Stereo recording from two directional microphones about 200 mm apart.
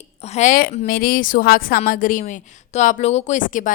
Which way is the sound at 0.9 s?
45° left (ahead or behind).